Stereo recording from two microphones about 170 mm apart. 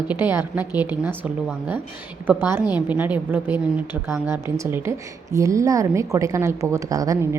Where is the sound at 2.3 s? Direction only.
10° right (ahead or behind).